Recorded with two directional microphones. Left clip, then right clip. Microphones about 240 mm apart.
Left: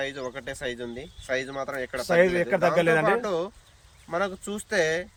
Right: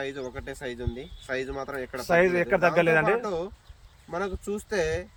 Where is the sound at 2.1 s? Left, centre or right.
Centre.